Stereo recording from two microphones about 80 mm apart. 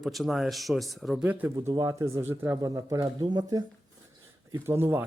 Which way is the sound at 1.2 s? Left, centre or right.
Right.